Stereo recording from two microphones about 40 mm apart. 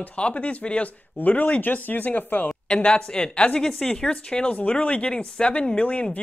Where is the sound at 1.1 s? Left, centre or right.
Left.